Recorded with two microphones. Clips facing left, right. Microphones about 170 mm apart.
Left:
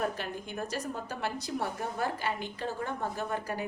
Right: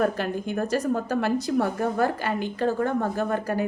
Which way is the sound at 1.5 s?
70° right (ahead or behind).